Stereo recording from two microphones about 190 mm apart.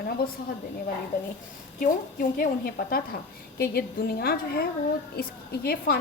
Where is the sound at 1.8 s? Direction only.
45° left (ahead or behind).